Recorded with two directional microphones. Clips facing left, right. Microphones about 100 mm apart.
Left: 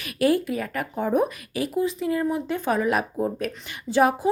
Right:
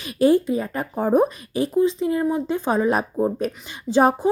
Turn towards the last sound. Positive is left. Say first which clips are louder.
# right 2 dB
turn(degrees=-25)  # may be behind; listen again after turning